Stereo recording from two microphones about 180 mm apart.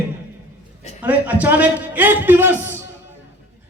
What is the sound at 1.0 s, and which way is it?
A man's voice, 10° right (ahead or behind).